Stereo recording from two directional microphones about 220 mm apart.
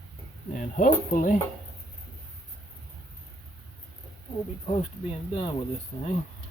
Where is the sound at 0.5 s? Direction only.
35° left (ahead or behind).